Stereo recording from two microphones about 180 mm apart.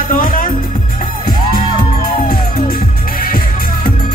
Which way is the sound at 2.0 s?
55° left (ahead or behind).